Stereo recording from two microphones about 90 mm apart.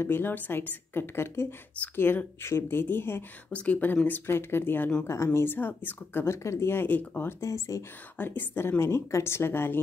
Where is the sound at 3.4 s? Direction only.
15° left (ahead or behind).